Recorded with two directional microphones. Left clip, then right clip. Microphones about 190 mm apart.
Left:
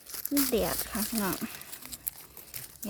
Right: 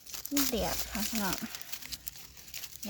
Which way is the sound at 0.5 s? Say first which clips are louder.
Left 4 dB; 35° left (ahead or behind).